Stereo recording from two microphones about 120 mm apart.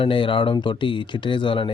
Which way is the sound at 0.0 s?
45° left (ahead or behind).